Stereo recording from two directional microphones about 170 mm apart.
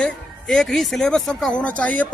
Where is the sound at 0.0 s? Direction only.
Centre (ahead or behind).